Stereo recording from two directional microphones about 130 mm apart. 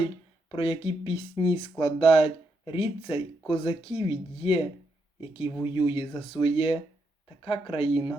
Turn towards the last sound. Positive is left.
turn(degrees=45)  # may be behind; listen again after turning